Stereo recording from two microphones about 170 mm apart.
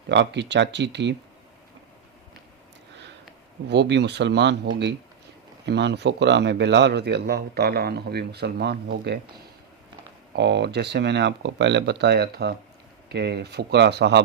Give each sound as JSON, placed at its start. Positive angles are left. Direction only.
{"t": 0.1, "sound": "speech", "side_deg": -90}
{"t": 3.7, "sound": "speech", "side_deg": -90}
{"t": 10.3, "sound": "speech", "side_deg": -90}